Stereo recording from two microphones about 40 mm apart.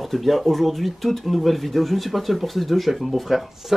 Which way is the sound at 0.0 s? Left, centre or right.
Centre.